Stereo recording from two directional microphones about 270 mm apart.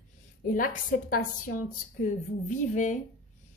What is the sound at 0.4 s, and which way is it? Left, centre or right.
A woman's voice, left.